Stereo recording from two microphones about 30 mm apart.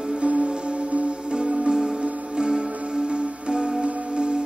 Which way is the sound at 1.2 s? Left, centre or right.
Right.